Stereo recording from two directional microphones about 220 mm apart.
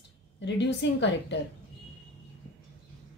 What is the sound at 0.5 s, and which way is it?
Speech, 55° left (ahead or behind).